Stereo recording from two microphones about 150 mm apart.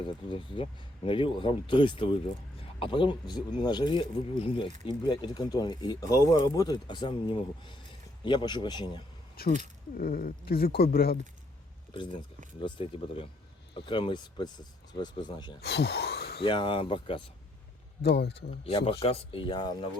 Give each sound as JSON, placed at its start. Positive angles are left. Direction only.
{"t": 0.0, "sound": "speech", "side_deg": 35}
{"t": 9.4, "sound": "speech", "side_deg": 90}
{"t": 10.0, "sound": "speech", "side_deg": 70}
{"t": 12.5, "sound": "speech", "side_deg": 30}
{"t": 15.6, "sound": "speech", "side_deg": 90}
{"t": 16.4, "sound": "speech", "side_deg": 35}
{"t": 18.0, "sound": "speech", "side_deg": 90}
{"t": 18.6, "sound": "speech", "side_deg": 40}